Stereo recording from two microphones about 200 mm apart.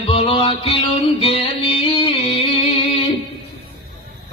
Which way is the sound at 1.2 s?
30° left (ahead or behind).